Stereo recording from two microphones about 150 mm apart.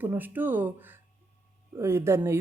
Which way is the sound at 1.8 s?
15° right (ahead or behind).